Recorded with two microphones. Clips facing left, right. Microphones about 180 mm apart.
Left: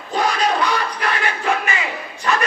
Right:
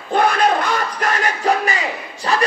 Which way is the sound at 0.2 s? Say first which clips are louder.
Right 2 dB; 55° right (ahead or behind).